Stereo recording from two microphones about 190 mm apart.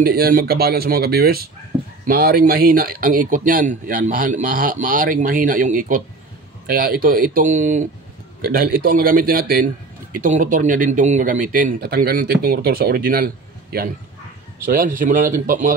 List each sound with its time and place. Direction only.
0.0 s speech: 50° right (ahead or behind)